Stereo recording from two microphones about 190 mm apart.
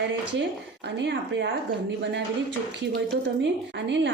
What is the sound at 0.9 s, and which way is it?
Speech, 70° right (ahead or behind).